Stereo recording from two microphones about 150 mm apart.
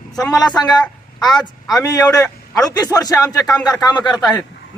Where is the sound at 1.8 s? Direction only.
25° left (ahead or behind).